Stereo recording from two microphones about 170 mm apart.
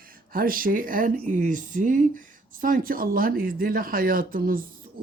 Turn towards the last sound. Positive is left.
turn(degrees=-55)  # may be behind; listen again after turning